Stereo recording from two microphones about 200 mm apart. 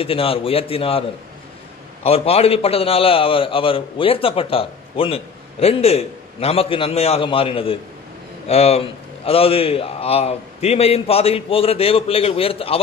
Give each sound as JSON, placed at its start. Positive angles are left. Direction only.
{"t": 0.0, "sound": "a man's voice", "side_deg": 30}
{"t": 2.0, "sound": "a man's voice", "side_deg": 30}